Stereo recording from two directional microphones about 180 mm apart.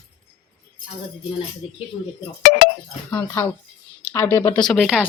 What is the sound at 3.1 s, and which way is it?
Speech, 15° left (ahead or behind).